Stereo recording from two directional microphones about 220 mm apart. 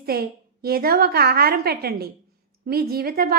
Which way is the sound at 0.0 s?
45° right (ahead or behind).